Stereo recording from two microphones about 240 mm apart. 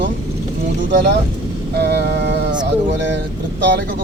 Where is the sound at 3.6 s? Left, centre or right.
Right.